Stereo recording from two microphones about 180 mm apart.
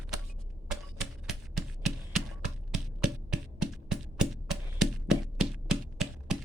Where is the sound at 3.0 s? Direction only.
5° right (ahead or behind).